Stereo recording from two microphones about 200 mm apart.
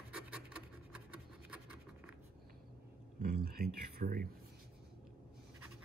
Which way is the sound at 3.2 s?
45° right (ahead or behind).